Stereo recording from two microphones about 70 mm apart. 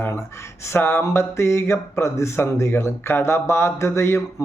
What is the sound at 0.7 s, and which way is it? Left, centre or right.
Speech, left.